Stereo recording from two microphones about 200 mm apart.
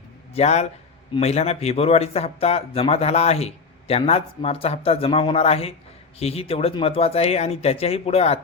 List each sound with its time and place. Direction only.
0.3 s speech: 35° left (ahead or behind)